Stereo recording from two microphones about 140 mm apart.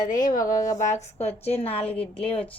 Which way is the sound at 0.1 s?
70° left (ahead or behind).